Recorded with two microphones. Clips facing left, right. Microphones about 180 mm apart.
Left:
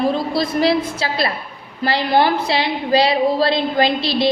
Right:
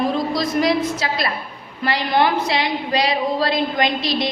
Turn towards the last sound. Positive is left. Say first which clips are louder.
# left 3 dB
turn(degrees=30)  # may be behind; listen again after turning